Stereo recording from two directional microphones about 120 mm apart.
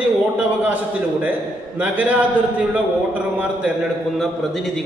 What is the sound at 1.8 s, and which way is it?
Speech, 15° right (ahead or behind).